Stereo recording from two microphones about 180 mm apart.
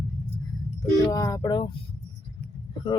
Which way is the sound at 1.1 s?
15° left (ahead or behind).